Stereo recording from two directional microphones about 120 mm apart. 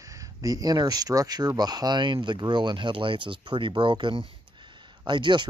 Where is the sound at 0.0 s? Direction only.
30° right (ahead or behind).